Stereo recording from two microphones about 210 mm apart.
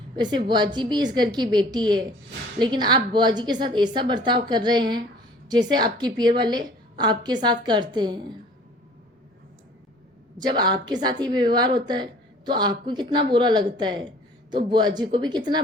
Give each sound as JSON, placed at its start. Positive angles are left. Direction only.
{"t": 0.2, "sound": "a woman's voice", "side_deg": -20}
{"t": 10.4, "sound": "a woman's voice", "side_deg": -20}